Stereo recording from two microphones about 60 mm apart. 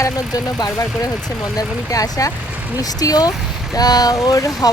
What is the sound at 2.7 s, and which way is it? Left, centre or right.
Speech, left.